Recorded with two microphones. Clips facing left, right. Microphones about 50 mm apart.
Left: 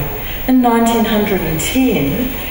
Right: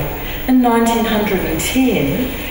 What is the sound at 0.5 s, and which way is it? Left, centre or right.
Speech, centre.